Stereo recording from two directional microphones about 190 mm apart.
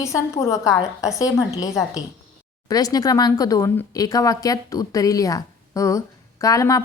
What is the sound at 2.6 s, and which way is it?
Speech, 20° left (ahead or behind).